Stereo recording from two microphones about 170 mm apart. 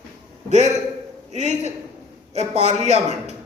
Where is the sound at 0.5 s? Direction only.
45° right (ahead or behind).